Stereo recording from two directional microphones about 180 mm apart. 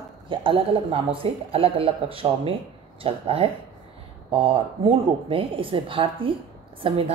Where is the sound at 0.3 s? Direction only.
30° right (ahead or behind).